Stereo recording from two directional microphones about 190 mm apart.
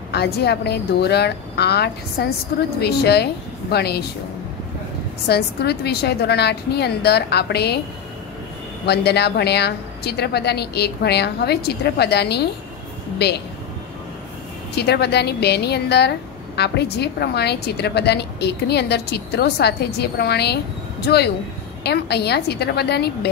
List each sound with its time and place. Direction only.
0.1 s a woman's voice: 60° left (ahead or behind)
5.3 s a woman's voice: 60° left (ahead or behind)
8.8 s a woman's voice: 60° left (ahead or behind)
14.8 s a woman's voice: 60° left (ahead or behind)